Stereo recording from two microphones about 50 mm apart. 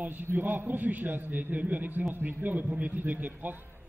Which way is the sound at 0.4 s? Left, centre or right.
Right.